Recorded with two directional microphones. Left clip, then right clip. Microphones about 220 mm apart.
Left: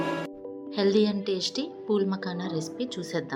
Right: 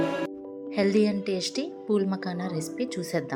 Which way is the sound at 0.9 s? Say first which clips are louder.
Left 2 dB; 55° right (ahead or behind).